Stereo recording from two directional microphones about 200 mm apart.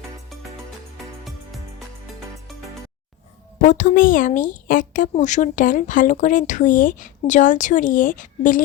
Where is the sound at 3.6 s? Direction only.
40° left (ahead or behind).